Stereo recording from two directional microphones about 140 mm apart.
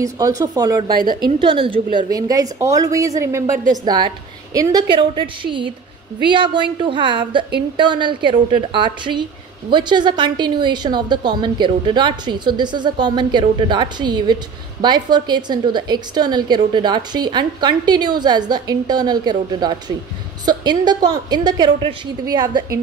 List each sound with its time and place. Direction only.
0.0 s a woman's voice: 25° right (ahead or behind)